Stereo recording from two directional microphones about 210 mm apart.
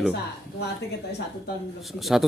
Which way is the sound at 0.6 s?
50° left (ahead or behind).